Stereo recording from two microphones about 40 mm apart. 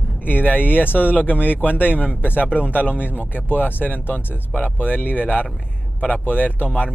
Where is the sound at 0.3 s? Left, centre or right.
Left.